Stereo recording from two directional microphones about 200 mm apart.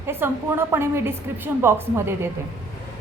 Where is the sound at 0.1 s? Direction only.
10° right (ahead or behind).